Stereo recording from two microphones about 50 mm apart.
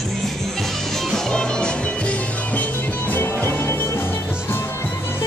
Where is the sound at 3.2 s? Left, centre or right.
Left.